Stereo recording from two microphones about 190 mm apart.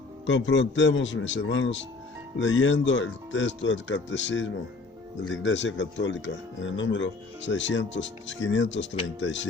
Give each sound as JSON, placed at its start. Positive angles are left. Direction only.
{"t": 0.3, "sound": "speech", "side_deg": 75}